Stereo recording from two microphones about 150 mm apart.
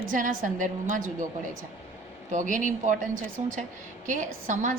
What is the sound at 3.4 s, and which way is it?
A woman's voice, 50° right (ahead or behind).